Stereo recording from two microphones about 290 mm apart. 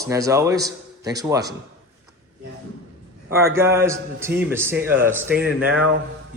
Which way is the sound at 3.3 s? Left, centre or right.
Centre.